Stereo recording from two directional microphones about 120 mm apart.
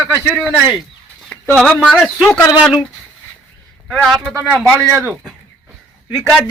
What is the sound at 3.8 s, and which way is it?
Speech, centre (ahead or behind).